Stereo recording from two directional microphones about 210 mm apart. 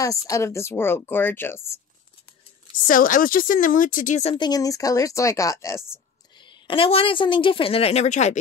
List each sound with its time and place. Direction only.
0.3 s a woman's voice: 15° left (ahead or behind)
2.9 s speech: 40° left (ahead or behind)